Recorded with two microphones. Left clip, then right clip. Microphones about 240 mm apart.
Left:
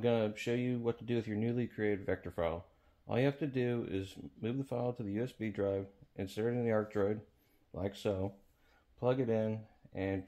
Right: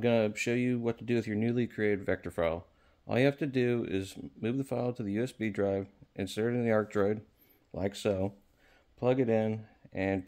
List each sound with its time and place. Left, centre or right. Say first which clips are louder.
0.0 s speech: right 5 dB; right